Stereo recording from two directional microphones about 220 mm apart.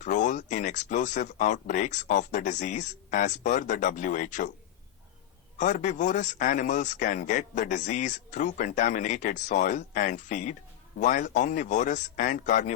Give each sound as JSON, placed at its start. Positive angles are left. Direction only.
{"t": 0.0, "sound": "a man's voice", "side_deg": 35}
{"t": 5.5, "sound": "a man's voice", "side_deg": 35}